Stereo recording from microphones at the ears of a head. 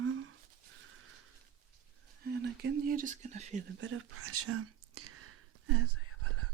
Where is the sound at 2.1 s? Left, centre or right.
Right.